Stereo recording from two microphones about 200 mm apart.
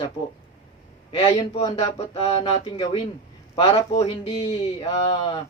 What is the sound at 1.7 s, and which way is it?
Speech, 30° left (ahead or behind).